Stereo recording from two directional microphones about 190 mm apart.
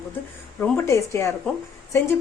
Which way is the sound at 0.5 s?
10° left (ahead or behind).